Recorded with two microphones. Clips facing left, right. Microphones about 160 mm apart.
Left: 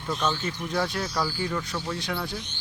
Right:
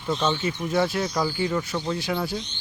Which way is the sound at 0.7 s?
5° right (ahead or behind).